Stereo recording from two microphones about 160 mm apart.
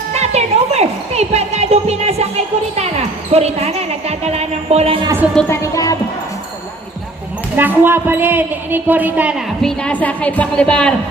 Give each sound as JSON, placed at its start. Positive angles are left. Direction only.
{"t": 0.2, "sound": "speech", "side_deg": -40}
{"t": 3.3, "sound": "music", "side_deg": -40}
{"t": 5.5, "sound": "music", "side_deg": 20}
{"t": 7.5, "sound": "a woman's voice", "side_deg": -10}
{"t": 9.6, "sound": "a woman's voice", "side_deg": 5}